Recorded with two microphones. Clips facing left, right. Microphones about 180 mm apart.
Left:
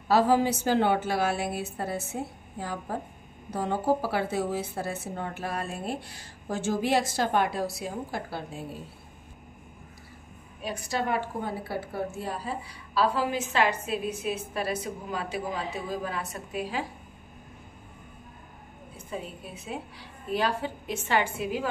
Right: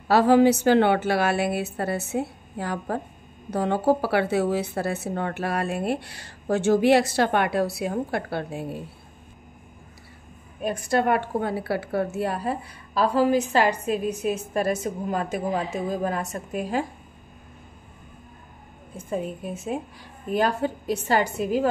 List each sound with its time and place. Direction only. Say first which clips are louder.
0.1 s a woman's voice: right 6 dB; 70° right (ahead or behind)
10.6 s a woman's voice: right 8 dB; 50° right (ahead or behind)
18.9 s a woman's voice: right 8 dB; 50° right (ahead or behind)